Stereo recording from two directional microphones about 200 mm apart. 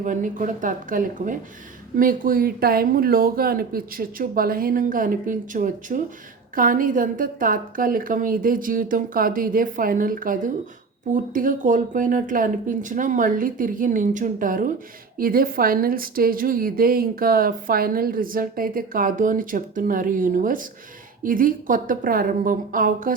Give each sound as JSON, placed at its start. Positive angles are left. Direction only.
{"t": 0.0, "sound": "a woman's voice", "side_deg": -40}